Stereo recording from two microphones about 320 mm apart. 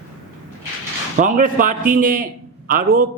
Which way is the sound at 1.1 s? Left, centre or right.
Right.